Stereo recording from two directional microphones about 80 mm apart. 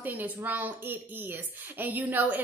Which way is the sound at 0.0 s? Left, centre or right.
Right.